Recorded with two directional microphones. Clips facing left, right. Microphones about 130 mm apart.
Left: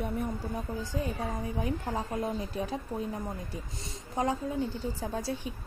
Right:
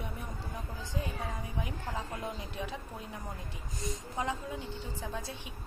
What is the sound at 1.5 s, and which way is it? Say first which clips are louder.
A woman's voice: left 6 dB; 35° left (ahead or behind).